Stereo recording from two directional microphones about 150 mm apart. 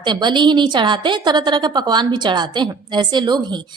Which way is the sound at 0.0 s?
30° right (ahead or behind).